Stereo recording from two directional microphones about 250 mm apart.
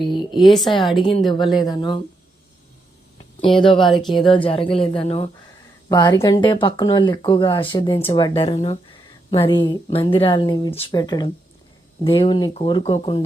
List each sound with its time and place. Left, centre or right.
0.4 s speech: centre
1.0 s speech: centre
3.4 s speech: left
3.8 s speech: centre
4.3 s speech: left